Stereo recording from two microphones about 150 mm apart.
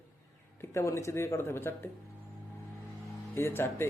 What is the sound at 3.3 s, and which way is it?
Speech, 15° left (ahead or behind).